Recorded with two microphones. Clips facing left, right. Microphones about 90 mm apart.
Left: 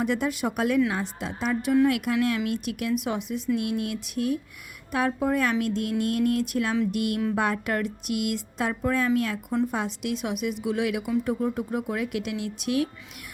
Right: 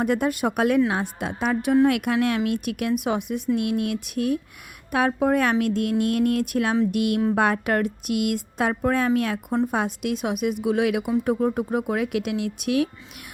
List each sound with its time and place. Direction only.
0.0 s a woman's voice: 50° right (ahead or behind)